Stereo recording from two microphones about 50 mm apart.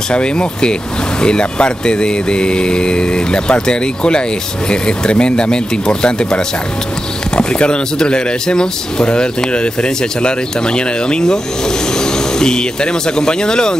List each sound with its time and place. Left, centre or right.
0.1 s speech: centre